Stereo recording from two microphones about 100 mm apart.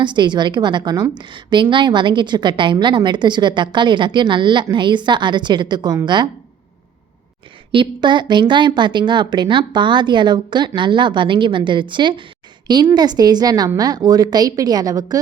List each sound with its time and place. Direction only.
0.0 s a woman's voice: 50° right (ahead or behind)
7.7 s a woman's voice: 55° right (ahead or behind); by 15.2 s 40° right (ahead or behind)